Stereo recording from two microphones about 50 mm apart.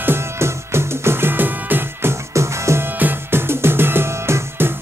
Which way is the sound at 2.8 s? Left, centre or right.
Right.